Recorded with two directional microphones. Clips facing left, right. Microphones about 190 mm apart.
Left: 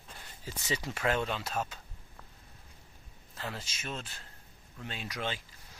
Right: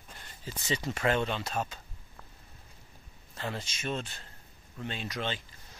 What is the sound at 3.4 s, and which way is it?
Speech, 5° left (ahead or behind).